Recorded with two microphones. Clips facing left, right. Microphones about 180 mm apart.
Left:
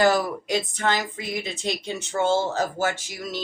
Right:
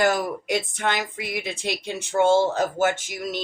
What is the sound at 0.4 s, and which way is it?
A woman's voice, 55° right (ahead or behind).